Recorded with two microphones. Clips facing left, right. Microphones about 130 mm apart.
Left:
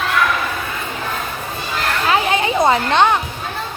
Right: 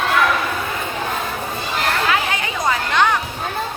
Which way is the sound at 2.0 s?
25° left (ahead or behind).